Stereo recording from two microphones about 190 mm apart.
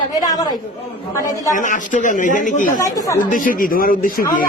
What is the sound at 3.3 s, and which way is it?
Speech, 45° left (ahead or behind).